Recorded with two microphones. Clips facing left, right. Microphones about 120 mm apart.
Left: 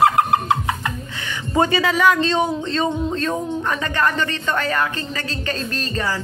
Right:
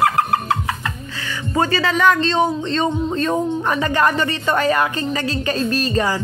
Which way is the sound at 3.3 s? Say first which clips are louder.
Right 4 dB; 15° right (ahead or behind).